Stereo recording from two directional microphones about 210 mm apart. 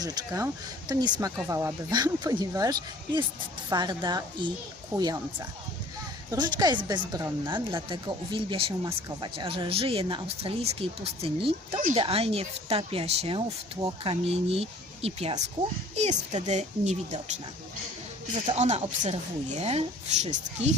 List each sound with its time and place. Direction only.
0.0 s speech: 15° right (ahead or behind)
6.3 s speech: 20° right (ahead or behind)
7.5 s speech: 25° right (ahead or behind)
18.4 s speech: 30° right (ahead or behind)